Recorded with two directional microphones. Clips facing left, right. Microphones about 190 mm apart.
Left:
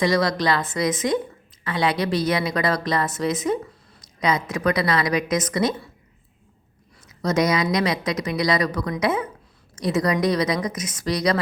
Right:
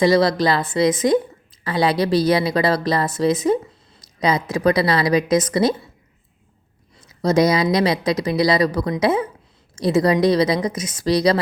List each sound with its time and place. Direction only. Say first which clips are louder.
0.0 s speech: right 5 dB; 30° right (ahead or behind)
7.1 s a woman's voice: right 4 dB; 30° right (ahead or behind)